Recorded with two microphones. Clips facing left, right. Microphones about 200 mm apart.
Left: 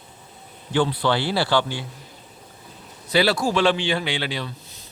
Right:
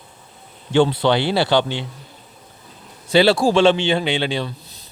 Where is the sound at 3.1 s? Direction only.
25° right (ahead or behind).